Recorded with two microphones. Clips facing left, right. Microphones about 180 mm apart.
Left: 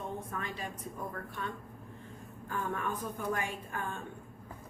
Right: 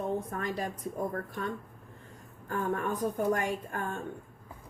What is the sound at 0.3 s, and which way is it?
A woman's voice, 45° right (ahead or behind).